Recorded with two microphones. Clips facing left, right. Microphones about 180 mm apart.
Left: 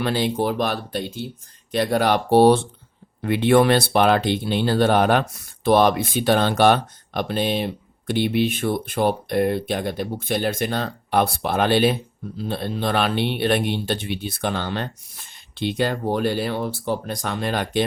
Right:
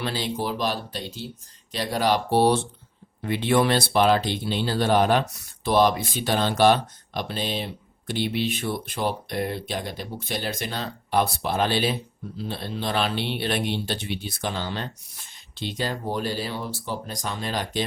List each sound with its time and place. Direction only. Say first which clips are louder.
0.0 s speech: left 6 dB; 55° left (ahead or behind)